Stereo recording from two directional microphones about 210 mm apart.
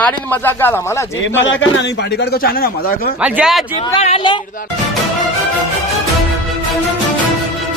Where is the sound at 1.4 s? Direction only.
60° left (ahead or behind); by 3.2 s 45° left (ahead or behind).